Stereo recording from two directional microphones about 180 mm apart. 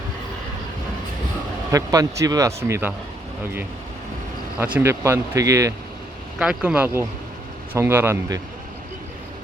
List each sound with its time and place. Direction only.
1.7 s speech: 20° right (ahead or behind)
4.5 s speech: 10° right (ahead or behind)
6.4 s speech: 5° right (ahead or behind)